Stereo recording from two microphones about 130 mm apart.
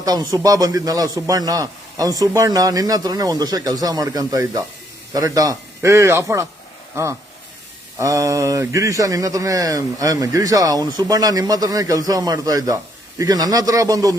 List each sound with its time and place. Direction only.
0.0 s speech: 30° right (ahead or behind)